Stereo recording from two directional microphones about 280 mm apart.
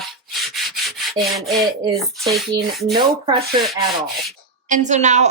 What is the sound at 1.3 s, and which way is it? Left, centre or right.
Speech, centre.